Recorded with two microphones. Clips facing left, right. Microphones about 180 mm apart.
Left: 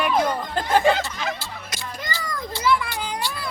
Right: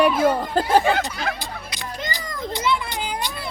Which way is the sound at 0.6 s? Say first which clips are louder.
Right 2 dB; 35° right (ahead or behind).